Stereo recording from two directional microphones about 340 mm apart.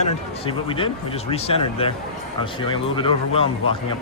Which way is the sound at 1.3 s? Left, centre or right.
Centre.